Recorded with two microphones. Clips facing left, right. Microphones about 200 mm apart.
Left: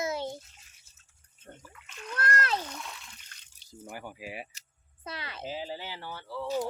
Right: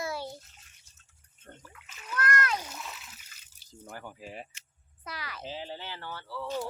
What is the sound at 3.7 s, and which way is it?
Speech, 10° left (ahead or behind).